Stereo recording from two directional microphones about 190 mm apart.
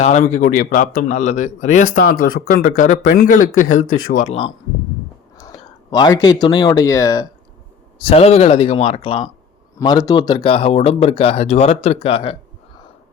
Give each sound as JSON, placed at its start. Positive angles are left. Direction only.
{"t": 0.0, "sound": "speech", "side_deg": 40}
{"t": 5.5, "sound": "speech", "side_deg": 20}
{"t": 7.9, "sound": "speech", "side_deg": 30}